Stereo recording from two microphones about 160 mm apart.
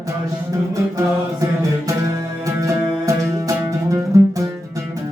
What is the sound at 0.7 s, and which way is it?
Mantra, 20° right (ahead or behind).